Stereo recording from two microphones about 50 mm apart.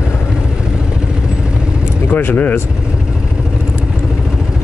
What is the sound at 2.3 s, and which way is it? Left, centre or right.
Speech, left.